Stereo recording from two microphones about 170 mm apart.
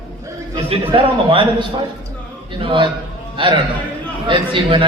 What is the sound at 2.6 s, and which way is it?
A man's voice, 30° right (ahead or behind).